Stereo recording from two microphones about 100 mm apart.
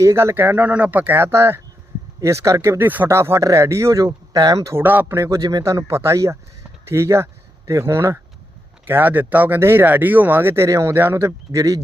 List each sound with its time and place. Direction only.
0.0 s speech: 30° right (ahead or behind)
4.3 s speech: 40° right (ahead or behind)
4.8 s speech: 20° right (ahead or behind)
5.4 s speech: 40° right (ahead or behind)